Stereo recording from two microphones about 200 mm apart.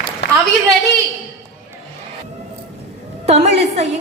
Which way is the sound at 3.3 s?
30° right (ahead or behind).